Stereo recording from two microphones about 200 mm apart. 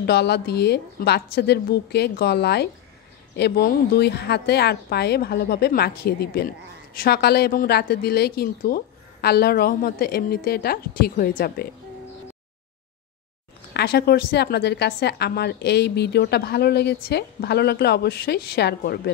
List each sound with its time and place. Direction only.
0.0 s a woman's voice: 55° left (ahead or behind)
13.7 s a woman's voice: 55° left (ahead or behind)